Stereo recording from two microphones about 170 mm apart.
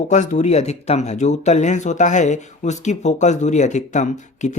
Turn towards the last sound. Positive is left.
turn(degrees=45)  # may be behind; listen again after turning